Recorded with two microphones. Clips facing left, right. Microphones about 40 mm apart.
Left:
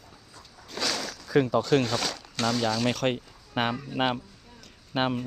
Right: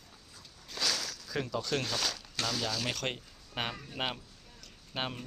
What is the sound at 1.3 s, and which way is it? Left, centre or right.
Speech, left.